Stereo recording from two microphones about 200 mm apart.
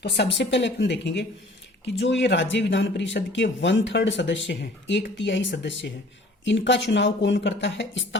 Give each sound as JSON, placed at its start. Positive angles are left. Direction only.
{"t": 0.0, "sound": "speech", "side_deg": 60}